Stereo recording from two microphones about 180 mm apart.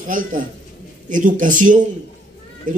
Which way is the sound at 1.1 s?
45° right (ahead or behind).